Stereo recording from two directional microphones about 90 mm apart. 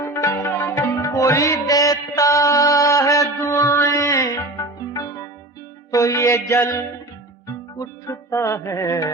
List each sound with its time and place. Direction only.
0.0 s music: 45° left (ahead or behind)